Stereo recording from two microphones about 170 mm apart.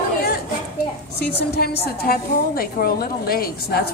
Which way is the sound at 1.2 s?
70° left (ahead or behind).